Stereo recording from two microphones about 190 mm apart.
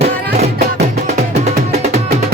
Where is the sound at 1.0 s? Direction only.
35° right (ahead or behind).